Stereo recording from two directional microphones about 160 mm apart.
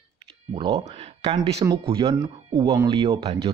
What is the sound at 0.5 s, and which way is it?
Speech, 35° right (ahead or behind).